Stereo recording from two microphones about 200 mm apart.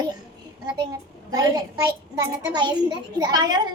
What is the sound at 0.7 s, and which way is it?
A child's voice, 20° right (ahead or behind).